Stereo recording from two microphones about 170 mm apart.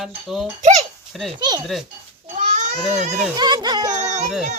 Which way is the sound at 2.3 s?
45° right (ahead or behind).